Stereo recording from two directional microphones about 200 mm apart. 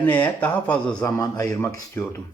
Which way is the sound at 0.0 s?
10° left (ahead or behind).